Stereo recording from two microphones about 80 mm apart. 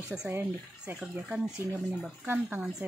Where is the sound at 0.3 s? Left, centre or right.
Right.